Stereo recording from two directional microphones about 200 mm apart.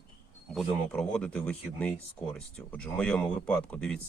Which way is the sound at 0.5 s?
5° left (ahead or behind).